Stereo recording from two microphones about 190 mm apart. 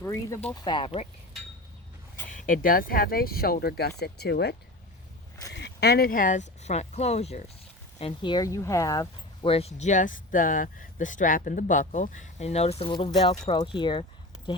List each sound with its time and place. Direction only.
0.0 s speech: 15° left (ahead or behind); by 1.0 s 30° left (ahead or behind)
2.3 s speech: 45° left (ahead or behind)
5.5 s speech: 65° left (ahead or behind); by 14.0 s 25° left (ahead or behind)